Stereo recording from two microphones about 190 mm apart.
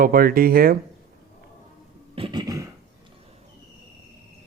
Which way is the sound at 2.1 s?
25° right (ahead or behind).